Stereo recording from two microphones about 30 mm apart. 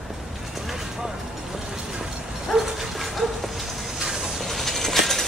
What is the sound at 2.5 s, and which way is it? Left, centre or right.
Dog, centre.